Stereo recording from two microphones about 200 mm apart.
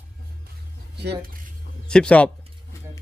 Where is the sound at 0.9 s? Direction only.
50° right (ahead or behind).